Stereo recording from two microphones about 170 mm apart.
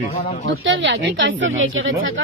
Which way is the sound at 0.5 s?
90° right.